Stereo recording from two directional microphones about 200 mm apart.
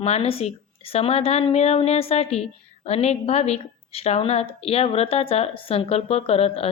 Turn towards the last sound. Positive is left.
turn(degrees=30)  # may be behind; listen again after turning